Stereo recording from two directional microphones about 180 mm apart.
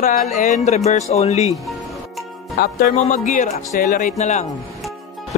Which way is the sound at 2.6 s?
55° left (ahead or behind).